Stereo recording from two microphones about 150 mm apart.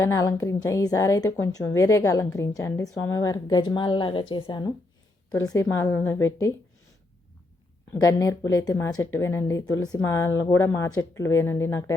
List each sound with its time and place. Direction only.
0.0 s speech: 20° left (ahead or behind)
5.3 s speech: 20° left (ahead or behind)
7.9 s speech: 20° left (ahead or behind)